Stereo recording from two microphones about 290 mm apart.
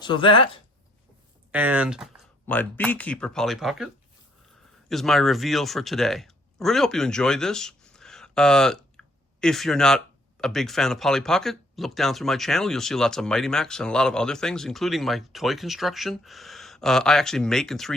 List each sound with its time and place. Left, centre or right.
0.0 s speech: centre
1.5 s speech: centre